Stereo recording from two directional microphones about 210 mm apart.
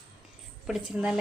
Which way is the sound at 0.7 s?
Centre (ahead or behind).